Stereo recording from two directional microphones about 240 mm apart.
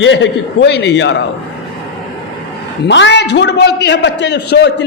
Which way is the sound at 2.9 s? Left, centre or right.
Left.